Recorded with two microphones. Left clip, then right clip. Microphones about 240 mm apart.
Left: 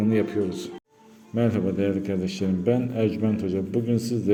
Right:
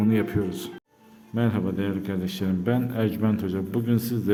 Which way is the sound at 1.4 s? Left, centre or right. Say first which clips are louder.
Left 3 dB; centre.